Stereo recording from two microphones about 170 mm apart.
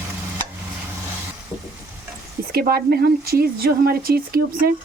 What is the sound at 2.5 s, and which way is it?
Speech, 65° right (ahead or behind).